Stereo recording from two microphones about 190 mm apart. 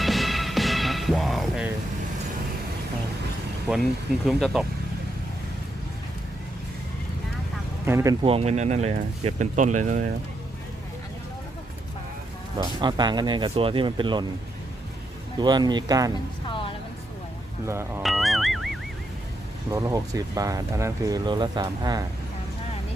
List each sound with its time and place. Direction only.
0.0 s music: centre (ahead or behind)
4.3 s speech: centre (ahead or behind)
7.9 s speech: 15° right (ahead or behind)
8.2 s speech: 30° right (ahead or behind)
12.5 s speech: 25° right (ahead or behind)
15.4 s speech: 20° right (ahead or behind)
17.7 s speech: 15° right (ahead or behind)
18.0 s music: centre (ahead or behind)
19.7 s speech: 20° right (ahead or behind)